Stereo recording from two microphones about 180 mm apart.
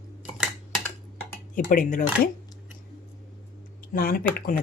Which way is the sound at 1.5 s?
45° left (ahead or behind).